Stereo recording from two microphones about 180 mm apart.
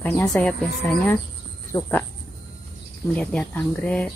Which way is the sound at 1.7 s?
20° left (ahead or behind).